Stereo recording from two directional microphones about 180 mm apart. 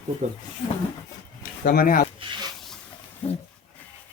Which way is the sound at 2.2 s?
25° right (ahead or behind).